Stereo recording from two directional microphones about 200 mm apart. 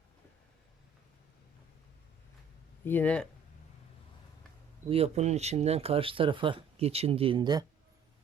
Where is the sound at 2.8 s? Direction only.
10° left (ahead or behind).